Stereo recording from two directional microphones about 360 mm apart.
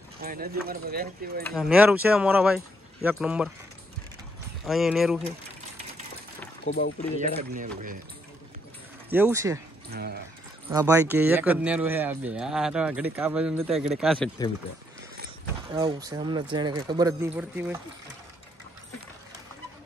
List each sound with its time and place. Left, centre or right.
0.2 s speech: right
1.4 s speech: centre
4.6 s speech: centre
6.6 s speech: left
7.2 s speech: right
9.1 s speech: centre
9.8 s speech: right
10.7 s speech: centre
15.7 s speech: centre